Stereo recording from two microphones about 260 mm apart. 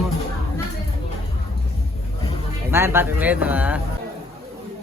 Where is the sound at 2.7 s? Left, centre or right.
Centre.